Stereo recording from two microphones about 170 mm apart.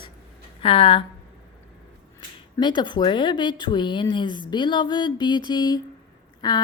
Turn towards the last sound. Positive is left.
turn(degrees=25)  # may be behind; listen again after turning